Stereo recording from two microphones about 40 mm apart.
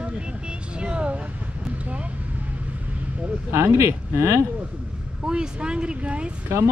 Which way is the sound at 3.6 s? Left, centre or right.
Right.